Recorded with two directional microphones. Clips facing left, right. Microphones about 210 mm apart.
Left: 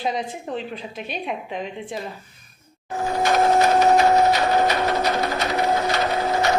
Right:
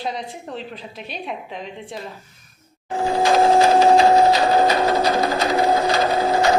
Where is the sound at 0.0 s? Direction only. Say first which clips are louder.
Left 2 dB; centre (ahead or behind).